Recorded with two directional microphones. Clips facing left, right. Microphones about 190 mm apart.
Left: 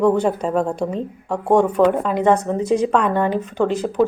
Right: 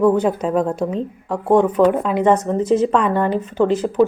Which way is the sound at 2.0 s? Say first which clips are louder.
Right 1 dB; centre (ahead or behind).